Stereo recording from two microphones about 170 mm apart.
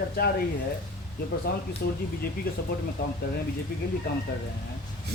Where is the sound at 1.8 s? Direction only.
75° left (ahead or behind).